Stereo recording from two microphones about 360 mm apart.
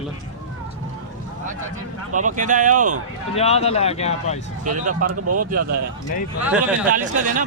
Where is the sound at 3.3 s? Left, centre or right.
Centre.